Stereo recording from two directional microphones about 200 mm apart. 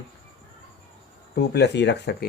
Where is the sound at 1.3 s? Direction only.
55° left (ahead or behind).